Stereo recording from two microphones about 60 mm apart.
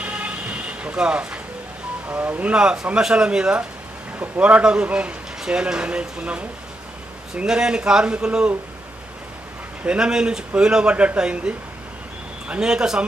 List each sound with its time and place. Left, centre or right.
0.0 s vehicle: right
2.0 s a man's voice: right
2.5 s a man's voice: centre
7.4 s speech: centre
9.8 s speech: centre